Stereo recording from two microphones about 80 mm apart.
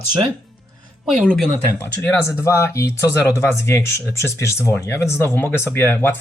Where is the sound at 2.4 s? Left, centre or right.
Left.